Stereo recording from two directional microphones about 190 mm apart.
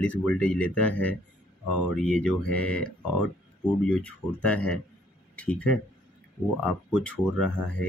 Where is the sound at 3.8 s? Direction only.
5° left (ahead or behind).